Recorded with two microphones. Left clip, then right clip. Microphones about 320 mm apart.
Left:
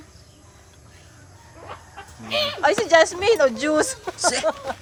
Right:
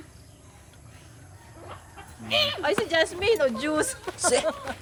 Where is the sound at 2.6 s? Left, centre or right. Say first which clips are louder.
Left 8 dB; left.